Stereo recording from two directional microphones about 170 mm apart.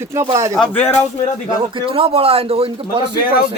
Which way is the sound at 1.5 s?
30° right (ahead or behind).